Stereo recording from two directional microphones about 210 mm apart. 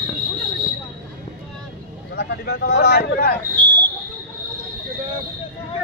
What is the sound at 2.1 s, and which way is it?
Speech, 50° left (ahead or behind).